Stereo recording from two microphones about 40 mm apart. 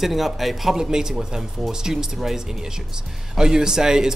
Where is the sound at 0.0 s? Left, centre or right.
Centre.